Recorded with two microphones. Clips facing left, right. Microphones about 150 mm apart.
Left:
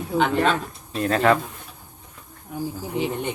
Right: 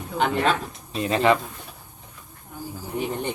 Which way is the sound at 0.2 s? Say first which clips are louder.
Left 1 dB; centre (ahead or behind).